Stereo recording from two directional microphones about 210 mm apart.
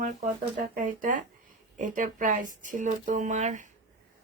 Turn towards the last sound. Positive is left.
turn(degrees=-35)  # may be behind; listen again after turning